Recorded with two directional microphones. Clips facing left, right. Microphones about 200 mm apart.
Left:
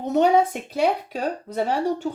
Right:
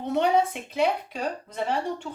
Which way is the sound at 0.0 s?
45° left (ahead or behind).